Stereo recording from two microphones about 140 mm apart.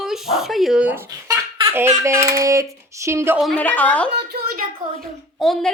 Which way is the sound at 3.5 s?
10° left (ahead or behind).